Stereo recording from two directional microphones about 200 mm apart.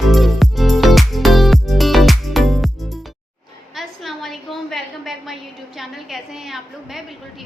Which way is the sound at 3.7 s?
Centre (ahead or behind).